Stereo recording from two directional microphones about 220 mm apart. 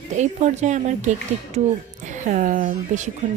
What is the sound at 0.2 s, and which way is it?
A woman's voice, 30° right (ahead or behind).